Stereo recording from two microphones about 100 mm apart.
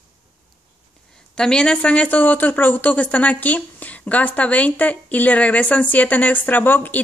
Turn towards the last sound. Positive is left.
turn(degrees=20)  # may be behind; listen again after turning